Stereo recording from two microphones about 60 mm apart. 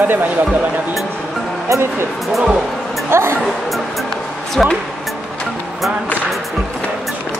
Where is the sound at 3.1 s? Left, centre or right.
Right.